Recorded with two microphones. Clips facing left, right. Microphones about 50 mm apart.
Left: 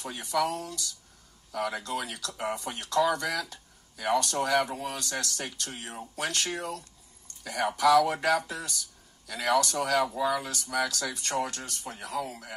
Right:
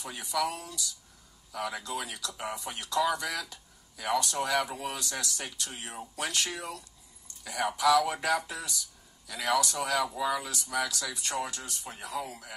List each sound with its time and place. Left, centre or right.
0.0 s a man's voice: left